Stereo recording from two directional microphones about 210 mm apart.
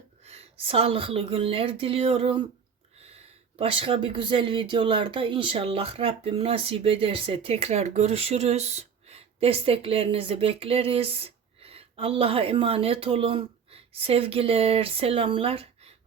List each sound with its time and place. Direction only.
0.3 s speech: 30° right (ahead or behind)
3.6 s speech: 25° right (ahead or behind)